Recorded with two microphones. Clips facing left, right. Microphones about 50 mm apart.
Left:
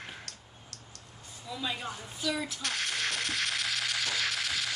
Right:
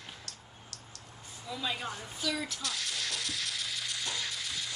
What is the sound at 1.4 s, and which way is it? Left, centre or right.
A woman's voice, centre.